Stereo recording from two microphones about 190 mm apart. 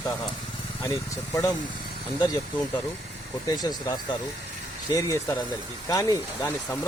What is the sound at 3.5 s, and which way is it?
Speech, 20° left (ahead or behind).